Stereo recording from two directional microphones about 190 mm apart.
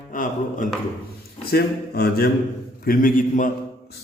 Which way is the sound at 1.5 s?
55° left (ahead or behind).